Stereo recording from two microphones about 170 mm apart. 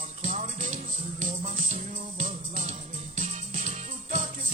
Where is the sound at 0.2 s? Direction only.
50° right (ahead or behind).